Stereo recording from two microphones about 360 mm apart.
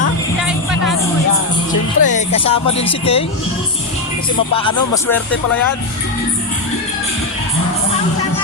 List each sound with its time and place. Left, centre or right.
2.0 s speech: left